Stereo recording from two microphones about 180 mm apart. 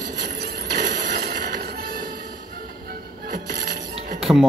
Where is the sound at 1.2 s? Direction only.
60° right (ahead or behind).